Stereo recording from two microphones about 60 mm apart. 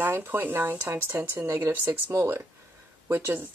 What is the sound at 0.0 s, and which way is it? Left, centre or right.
Speech, right.